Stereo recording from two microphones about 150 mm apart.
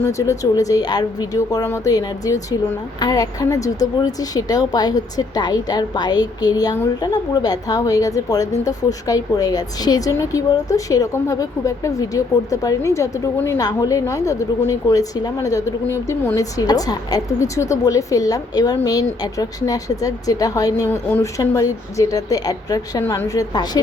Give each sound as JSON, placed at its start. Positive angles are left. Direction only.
{"t": 0.0, "sound": "a woman's voice", "side_deg": 20}